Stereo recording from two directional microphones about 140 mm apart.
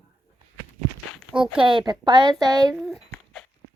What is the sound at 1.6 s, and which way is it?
A woman's voice, 35° right (ahead or behind).